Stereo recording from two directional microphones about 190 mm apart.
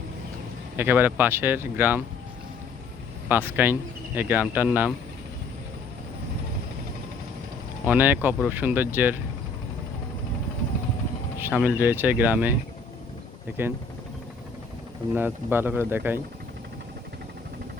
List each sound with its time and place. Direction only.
0.8 s speech: 10° right (ahead or behind)
3.2 s speech: 10° right (ahead or behind)
7.9 s speech: 10° right (ahead or behind)
11.3 s speech: 10° right (ahead or behind)
15.1 s speech: 10° right (ahead or behind)